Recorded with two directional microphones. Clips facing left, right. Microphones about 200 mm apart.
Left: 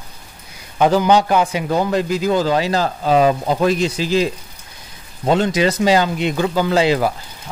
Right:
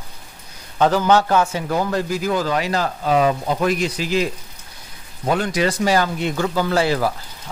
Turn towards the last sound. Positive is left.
turn(degrees=20)  # may be behind; listen again after turning